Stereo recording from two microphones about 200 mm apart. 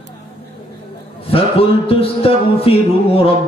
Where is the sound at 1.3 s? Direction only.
30° left (ahead or behind).